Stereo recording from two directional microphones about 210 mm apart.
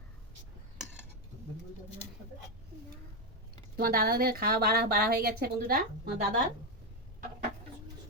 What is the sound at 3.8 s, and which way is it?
A woman's voice, 45° right (ahead or behind).